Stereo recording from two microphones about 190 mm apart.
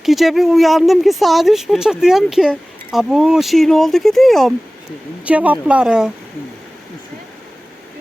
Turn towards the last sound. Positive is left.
turn(degrees=-5)  # may be behind; listen again after turning